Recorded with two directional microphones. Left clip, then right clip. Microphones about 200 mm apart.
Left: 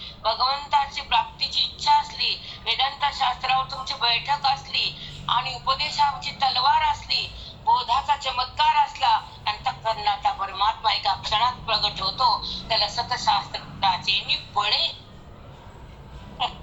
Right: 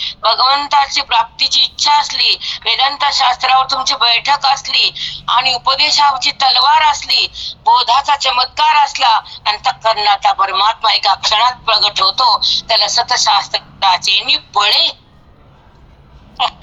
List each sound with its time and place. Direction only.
0.0 s speech: 45° right (ahead or behind)
16.4 s speech: 45° right (ahead or behind)